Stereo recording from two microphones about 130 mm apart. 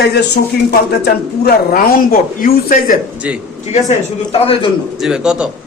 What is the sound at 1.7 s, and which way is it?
A woman's voice, 90° left.